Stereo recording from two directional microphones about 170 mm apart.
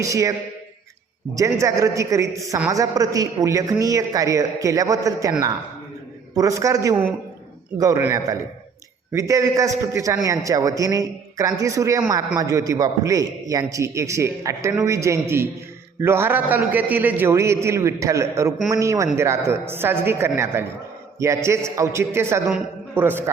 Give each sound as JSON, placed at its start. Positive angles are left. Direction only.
{"t": 0.0, "sound": "a man's voice", "side_deg": -20}
{"t": 6.3, "sound": "a man's voice", "side_deg": -20}